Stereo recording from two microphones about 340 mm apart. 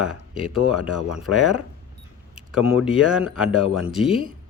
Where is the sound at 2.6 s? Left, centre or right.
Centre.